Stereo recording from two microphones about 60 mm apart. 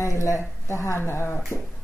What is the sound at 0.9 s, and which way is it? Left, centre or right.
Speech, left.